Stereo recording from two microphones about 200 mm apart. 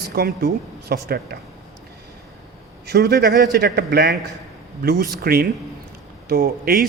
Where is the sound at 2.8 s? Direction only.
55° right (ahead or behind).